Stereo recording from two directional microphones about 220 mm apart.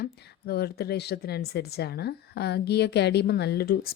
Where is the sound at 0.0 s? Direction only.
45° left (ahead or behind).